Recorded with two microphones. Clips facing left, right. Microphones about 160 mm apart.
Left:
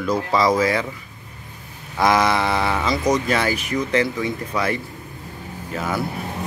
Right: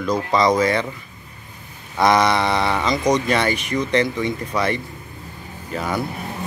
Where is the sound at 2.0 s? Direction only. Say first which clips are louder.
Right 1 dB; 5° left (ahead or behind).